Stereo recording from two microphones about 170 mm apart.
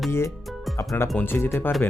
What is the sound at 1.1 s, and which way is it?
Speech, 10° left (ahead or behind).